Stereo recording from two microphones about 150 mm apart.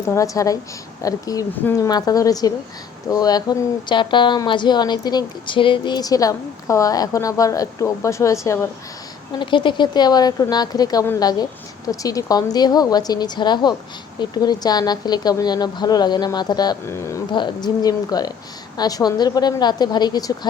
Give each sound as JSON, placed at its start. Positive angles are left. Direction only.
{"t": 0.1, "sound": "speech", "side_deg": 20}
{"t": 9.4, "sound": "speech", "side_deg": 30}
{"t": 17.3, "sound": "speech", "side_deg": 30}